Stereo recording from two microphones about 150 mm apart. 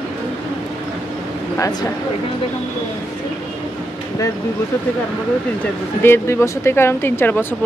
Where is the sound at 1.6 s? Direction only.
25° left (ahead or behind).